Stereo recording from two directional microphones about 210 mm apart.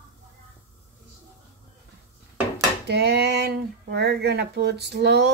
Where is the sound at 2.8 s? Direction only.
50° right (ahead or behind).